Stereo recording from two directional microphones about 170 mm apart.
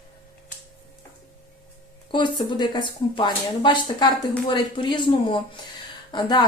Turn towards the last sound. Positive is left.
turn(degrees=25)  # may be behind; listen again after turning